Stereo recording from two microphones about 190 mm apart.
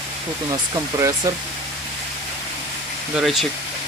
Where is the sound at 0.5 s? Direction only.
15° right (ahead or behind).